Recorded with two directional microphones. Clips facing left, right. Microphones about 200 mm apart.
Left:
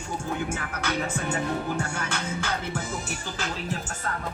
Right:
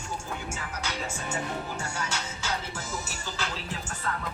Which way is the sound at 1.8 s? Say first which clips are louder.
Left 4 dB; 55° left (ahead or behind).